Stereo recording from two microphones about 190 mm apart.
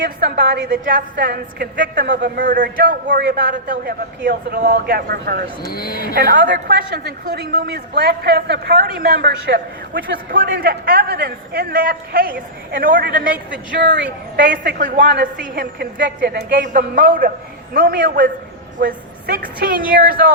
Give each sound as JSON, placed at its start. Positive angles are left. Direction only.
{"t": 0.0, "sound": "a woman's voice", "side_deg": -55}
{"t": 3.5, "sound": "a woman's voice", "side_deg": -45}
{"t": 5.6, "sound": "speech", "side_deg": 55}
{"t": 6.1, "sound": "a woman's voice", "side_deg": -50}
{"t": 13.8, "sound": "a woman's voice", "side_deg": -65}